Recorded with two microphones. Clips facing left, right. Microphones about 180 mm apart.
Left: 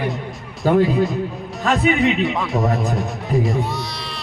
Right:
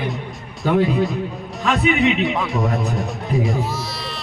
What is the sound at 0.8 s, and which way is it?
Speech, centre (ahead or behind).